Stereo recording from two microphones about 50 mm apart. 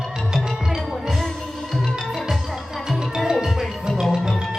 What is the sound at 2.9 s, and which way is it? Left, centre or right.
Music, centre.